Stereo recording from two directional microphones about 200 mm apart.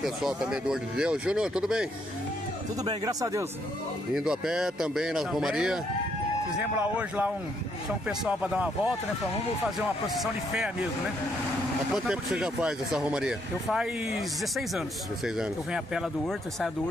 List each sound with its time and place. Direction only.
0.0 s speech: centre (ahead or behind)
2.8 s speech: 20° right (ahead or behind)
4.1 s speech: 5° right (ahead or behind)
10.0 s speech: centre (ahead or behind)
11.9 s speech: 5° right (ahead or behind)
15.2 s speech: centre (ahead or behind)